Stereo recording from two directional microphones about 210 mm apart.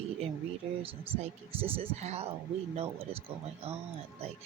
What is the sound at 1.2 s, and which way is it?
Speech, 25° right (ahead or behind).